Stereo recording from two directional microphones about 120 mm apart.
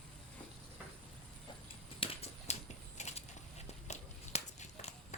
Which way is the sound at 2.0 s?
55° left (ahead or behind).